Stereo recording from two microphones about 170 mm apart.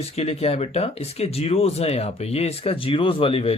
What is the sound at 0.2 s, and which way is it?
Speech, 35° left (ahead or behind).